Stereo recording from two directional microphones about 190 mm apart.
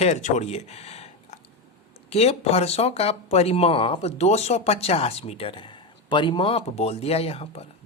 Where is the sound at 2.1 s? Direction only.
30° left (ahead or behind).